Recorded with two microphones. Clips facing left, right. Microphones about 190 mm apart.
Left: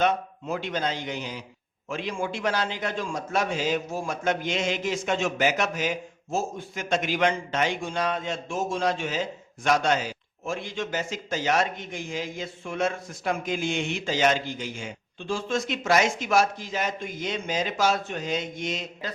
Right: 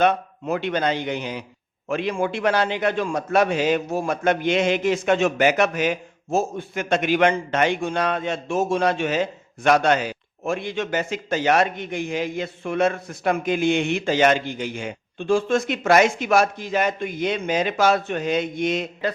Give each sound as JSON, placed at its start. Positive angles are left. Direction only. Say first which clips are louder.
{"t": 0.0, "sound": "a man's voice", "louder": "right 5 dB", "side_deg": -65}